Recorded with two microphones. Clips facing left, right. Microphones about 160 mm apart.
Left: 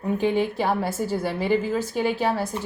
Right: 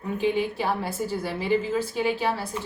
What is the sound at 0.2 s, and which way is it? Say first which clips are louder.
A woman's voice: even; 45° left (ahead or behind).